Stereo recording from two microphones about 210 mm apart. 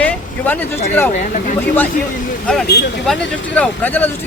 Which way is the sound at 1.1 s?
35° left (ahead or behind).